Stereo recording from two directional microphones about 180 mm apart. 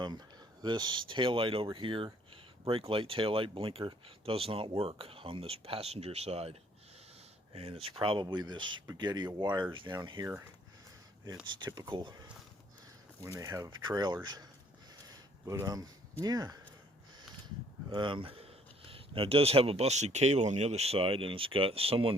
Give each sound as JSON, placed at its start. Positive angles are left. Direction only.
{"t": 0.6, "sound": "speech", "side_deg": -25}
{"t": 11.6, "sound": "speech", "side_deg": -25}
{"t": 13.2, "sound": "speech", "side_deg": -20}
{"t": 15.0, "sound": "a sound", "side_deg": -20}
{"t": 16.2, "sound": "speech", "side_deg": -20}
{"t": 17.9, "sound": "speech", "side_deg": -25}